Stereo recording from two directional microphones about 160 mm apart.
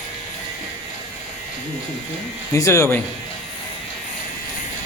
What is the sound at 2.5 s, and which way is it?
Speech, 20° left (ahead or behind).